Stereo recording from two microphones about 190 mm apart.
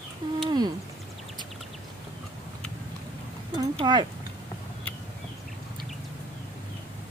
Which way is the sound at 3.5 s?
25° right (ahead or behind).